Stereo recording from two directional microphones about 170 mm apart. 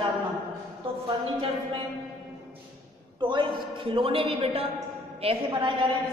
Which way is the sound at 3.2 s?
30° right (ahead or behind).